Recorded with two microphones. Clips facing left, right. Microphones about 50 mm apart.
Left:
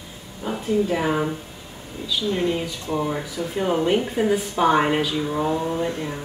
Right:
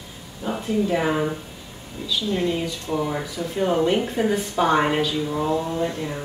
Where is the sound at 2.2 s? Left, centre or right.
Left.